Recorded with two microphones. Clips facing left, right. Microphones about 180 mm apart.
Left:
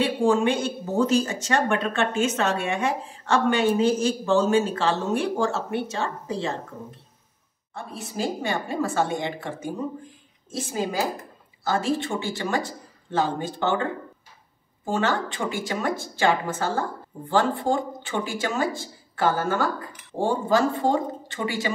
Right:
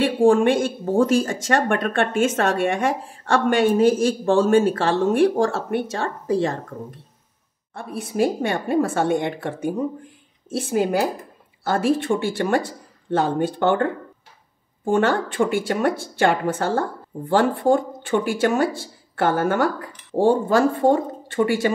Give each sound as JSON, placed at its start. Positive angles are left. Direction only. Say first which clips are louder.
{"t": 0.0, "sound": "speech", "louder": "right 5 dB", "side_deg": -55}
{"t": 7.7, "sound": "a woman's voice", "louder": "right 6 dB", "side_deg": -60}
{"t": 14.9, "sound": "a woman's voice", "louder": "right 5 dB", "side_deg": -55}